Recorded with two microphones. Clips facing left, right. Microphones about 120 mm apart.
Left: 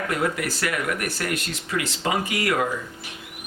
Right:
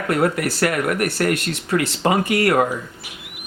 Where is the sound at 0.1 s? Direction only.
60° right (ahead or behind).